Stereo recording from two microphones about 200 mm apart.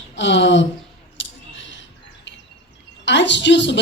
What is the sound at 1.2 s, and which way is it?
Scissors, 65° left (ahead or behind).